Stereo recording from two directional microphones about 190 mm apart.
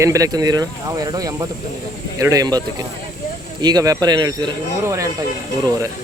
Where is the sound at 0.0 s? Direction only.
15° right (ahead or behind).